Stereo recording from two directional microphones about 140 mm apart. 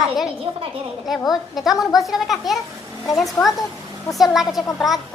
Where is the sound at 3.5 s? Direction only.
25° left (ahead or behind).